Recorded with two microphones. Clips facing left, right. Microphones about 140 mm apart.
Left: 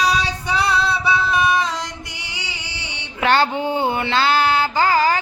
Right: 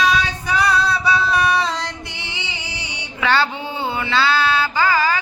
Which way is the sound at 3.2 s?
55° left (ahead or behind).